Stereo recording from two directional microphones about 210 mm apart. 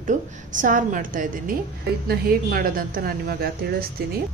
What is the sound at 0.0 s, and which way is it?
A woman's voice, 40° right (ahead or behind).